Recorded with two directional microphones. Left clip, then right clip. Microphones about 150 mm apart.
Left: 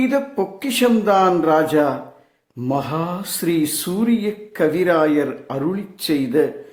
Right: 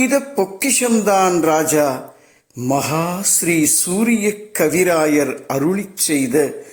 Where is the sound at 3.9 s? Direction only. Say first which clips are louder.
Right 1 dB; 20° right (ahead or behind).